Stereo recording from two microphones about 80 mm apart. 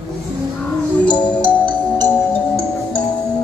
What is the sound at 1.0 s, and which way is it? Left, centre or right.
Music, centre.